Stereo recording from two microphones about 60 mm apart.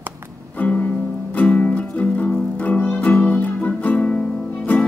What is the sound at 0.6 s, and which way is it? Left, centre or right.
Music, left.